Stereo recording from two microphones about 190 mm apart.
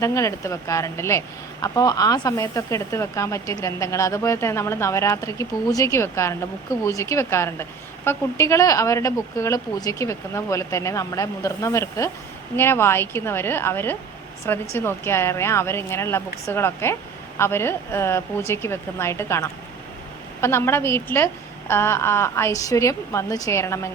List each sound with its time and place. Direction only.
0.0 s speech: 15° left (ahead or behind)